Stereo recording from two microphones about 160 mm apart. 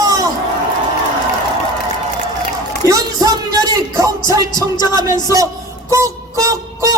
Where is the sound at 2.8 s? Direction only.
20° right (ahead or behind).